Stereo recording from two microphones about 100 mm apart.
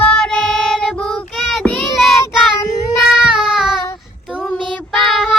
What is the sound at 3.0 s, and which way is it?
Child singing, 5° right (ahead or behind).